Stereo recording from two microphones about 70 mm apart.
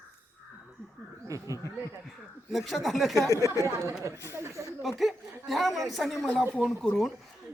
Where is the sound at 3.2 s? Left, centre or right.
Left.